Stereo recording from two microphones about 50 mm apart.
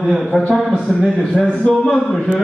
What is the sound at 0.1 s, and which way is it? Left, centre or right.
A man's voice, centre.